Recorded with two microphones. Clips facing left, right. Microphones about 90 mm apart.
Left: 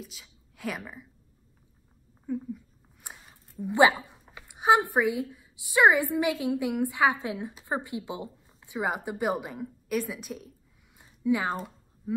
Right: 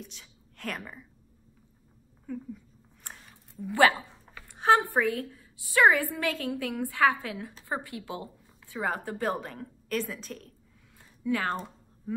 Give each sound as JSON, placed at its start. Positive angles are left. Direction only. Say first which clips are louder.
{"t": 0.0, "sound": "a woman's voice", "louder": "left 1 dB", "side_deg": 5}
{"t": 2.3, "sound": "a woman's voice", "louder": "left 5 dB", "side_deg": 15}
{"t": 11.0, "sound": "a sound", "louder": "left 3 dB", "side_deg": 15}